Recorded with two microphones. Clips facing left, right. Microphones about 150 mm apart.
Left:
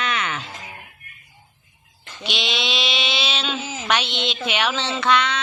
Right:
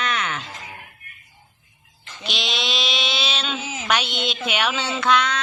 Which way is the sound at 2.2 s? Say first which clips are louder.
Left 1 dB; centre (ahead or behind).